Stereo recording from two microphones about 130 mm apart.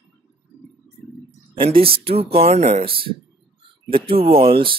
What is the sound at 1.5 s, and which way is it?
Speech, 45° right (ahead or behind).